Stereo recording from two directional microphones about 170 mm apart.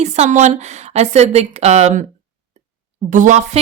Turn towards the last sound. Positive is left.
turn(degrees=-45)  # may be behind; listen again after turning